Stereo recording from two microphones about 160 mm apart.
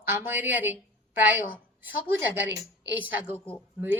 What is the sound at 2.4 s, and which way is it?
Speech, 90° right.